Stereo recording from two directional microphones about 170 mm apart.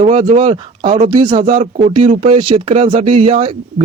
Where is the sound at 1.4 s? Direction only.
35° right (ahead or behind).